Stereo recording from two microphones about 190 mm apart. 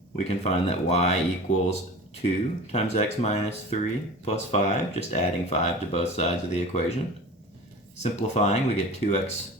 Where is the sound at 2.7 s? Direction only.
35° left (ahead or behind).